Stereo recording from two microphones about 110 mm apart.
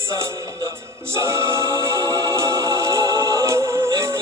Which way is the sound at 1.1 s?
25° right (ahead or behind).